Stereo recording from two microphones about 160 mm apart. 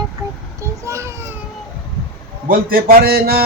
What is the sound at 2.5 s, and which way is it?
Speech, 65° right (ahead or behind).